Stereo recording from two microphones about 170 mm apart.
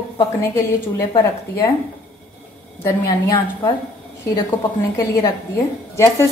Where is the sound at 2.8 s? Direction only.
15° left (ahead or behind).